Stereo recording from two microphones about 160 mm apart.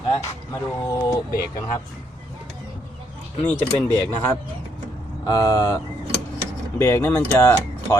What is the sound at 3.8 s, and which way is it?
Speech, 10° left (ahead or behind).